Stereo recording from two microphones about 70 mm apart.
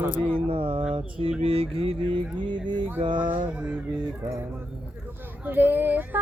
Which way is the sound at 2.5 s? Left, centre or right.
Right.